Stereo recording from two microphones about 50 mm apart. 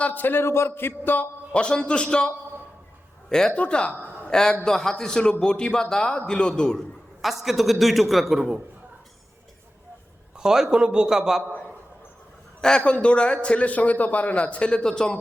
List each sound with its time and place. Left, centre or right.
0.0 s a man's voice: left
0.3 s a man's voice: left
1.5 s a man's voice: centre
3.5 s a man's voice: left
3.9 s a sound: right
4.3 s a man's voice: centre
6.7 s a man's voice: centre
10.3 s a man's voice: centre
12.6 s a man's voice: centre